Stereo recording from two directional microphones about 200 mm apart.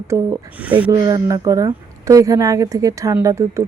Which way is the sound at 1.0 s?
20° right (ahead or behind).